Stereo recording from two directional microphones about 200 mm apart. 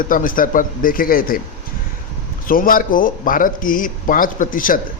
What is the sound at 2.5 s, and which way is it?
A man's voice, 45° left (ahead or behind).